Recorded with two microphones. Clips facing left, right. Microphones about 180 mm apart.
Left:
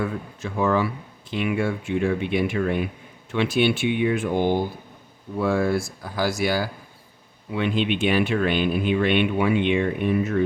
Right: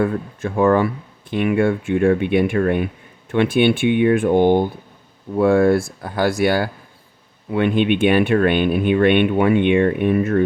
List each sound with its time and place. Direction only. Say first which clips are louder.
0.0 s speech: right 7 dB; 55° right (ahead or behind)